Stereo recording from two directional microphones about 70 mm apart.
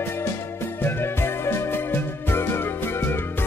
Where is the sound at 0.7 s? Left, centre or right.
Left.